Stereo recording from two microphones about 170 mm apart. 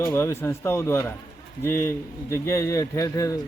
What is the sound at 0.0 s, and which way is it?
Speech, 15° left (ahead or behind).